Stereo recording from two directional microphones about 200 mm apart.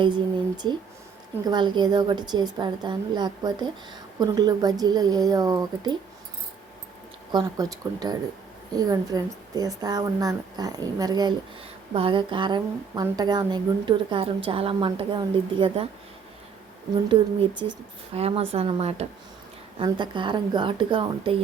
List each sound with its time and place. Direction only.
0.0 s a woman's voice: 20° right (ahead or behind)
7.3 s a woman's voice: 15° right (ahead or behind)
18.1 s a woman's voice: 30° right (ahead or behind)